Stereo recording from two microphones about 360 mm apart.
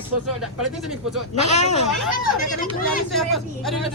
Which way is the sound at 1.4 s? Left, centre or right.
Centre.